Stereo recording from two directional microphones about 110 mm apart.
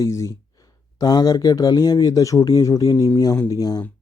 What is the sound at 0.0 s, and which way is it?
Speech, 30° left (ahead or behind).